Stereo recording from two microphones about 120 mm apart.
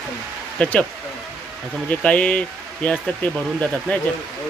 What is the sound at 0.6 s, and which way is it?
Speech, 10° left (ahead or behind).